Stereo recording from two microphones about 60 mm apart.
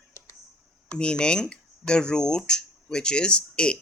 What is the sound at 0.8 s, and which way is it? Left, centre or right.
Speech, left.